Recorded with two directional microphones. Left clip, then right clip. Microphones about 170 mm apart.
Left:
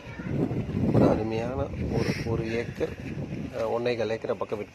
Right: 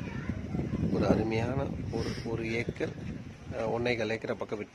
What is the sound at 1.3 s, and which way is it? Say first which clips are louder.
Speech: left 2 dB; 10° right (ahead or behind).